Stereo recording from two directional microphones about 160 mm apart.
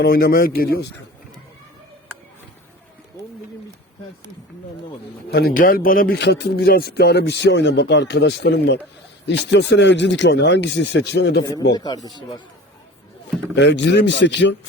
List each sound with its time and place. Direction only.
0.0 s speech: 70° left (ahead or behind)
5.3 s a man's voice: 75° left (ahead or behind); by 11.4 s 90° left
11.7 s speech: 25° left (ahead or behind)
13.6 s a man's voice: 90° left